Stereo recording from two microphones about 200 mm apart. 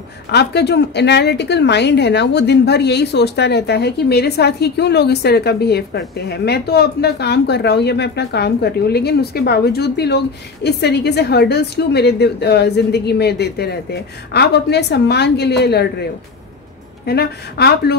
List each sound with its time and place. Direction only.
0.3 s a woman's voice: 55° left (ahead or behind)